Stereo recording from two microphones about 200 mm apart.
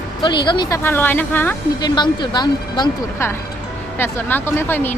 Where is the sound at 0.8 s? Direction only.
10° left (ahead or behind).